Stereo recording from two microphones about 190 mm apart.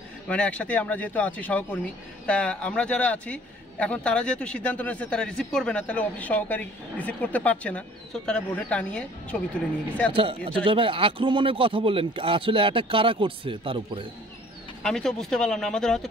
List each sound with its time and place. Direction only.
0.3 s speech: 5° left (ahead or behind)
10.1 s speech: 30° right (ahead or behind)
14.8 s speech: 5° left (ahead or behind)